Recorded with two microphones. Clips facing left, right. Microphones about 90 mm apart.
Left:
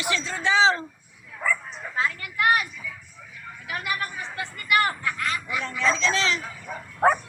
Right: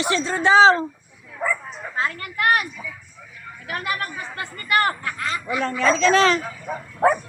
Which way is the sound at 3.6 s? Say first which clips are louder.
Right 3 dB; 45° right (ahead or behind).